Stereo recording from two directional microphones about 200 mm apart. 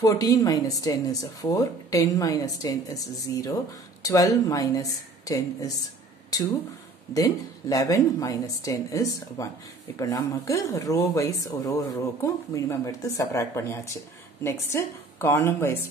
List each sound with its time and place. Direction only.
0.0 s speech: 20° left (ahead or behind)